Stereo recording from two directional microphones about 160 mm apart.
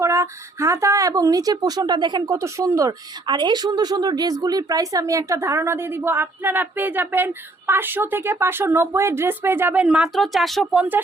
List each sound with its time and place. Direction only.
0.0 s speech: 20° right (ahead or behind)